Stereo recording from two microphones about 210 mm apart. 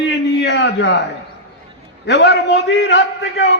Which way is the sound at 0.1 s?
60° left (ahead or behind).